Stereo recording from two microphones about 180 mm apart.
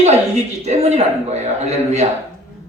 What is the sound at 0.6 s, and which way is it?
A man's voice, 40° right (ahead or behind).